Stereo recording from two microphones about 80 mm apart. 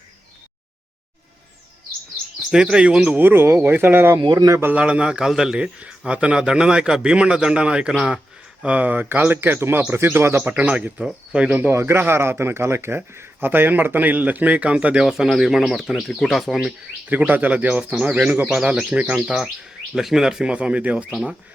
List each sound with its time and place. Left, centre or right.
2.5 s a man's voice: centre; by 4.2 s right
4.2 s a man's voice: right
4.6 s a man's voice: centre
10.5 s a man's voice: centre
10.9 s a man's voice: centre
11.7 s a man's voice: right; by 15.0 s centre
15.0 s speech: centre
17.1 s a man's voice: right